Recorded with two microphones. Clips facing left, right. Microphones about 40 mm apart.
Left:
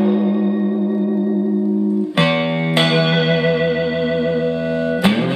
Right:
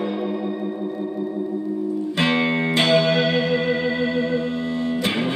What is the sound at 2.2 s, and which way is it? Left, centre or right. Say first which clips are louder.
Music: left 1 dB; left.